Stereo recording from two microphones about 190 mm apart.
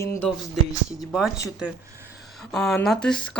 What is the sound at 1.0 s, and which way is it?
Speech, centre (ahead or behind).